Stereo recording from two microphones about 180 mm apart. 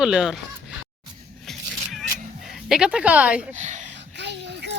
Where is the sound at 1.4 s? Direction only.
Centre (ahead or behind).